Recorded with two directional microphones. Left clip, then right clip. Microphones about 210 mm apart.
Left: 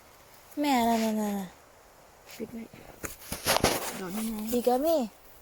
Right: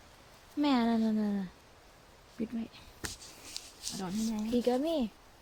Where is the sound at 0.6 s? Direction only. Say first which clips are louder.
Left 4 dB; 5° right (ahead or behind).